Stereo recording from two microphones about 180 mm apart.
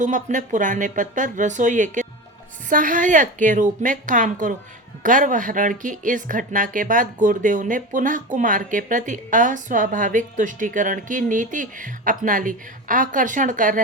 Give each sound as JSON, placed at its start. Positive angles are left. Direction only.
{"t": 0.0, "sound": "speech", "side_deg": -45}